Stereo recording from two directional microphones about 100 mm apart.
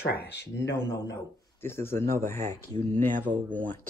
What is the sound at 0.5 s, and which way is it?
A man's voice, 25° left (ahead or behind).